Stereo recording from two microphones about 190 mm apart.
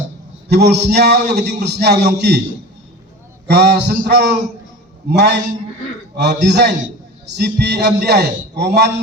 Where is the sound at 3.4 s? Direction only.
60° right (ahead or behind).